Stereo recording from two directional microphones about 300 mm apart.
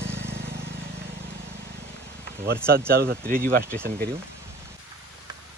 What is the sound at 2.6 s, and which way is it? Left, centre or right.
Speech, right.